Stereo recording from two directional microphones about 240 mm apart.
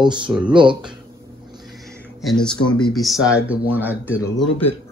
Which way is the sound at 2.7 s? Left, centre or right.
Centre.